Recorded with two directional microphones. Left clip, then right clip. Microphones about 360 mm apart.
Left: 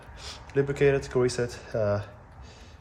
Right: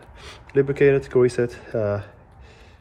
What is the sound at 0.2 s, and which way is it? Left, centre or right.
Speech, centre.